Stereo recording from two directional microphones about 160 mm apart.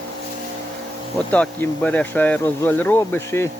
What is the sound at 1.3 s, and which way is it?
Speech, 10° left (ahead or behind).